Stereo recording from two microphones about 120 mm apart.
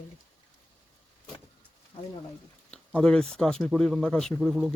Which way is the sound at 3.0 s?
5° left (ahead or behind).